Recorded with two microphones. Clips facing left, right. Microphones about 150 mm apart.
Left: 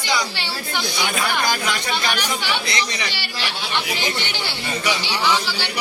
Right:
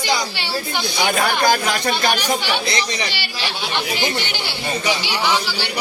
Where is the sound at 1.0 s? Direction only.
50° right (ahead or behind).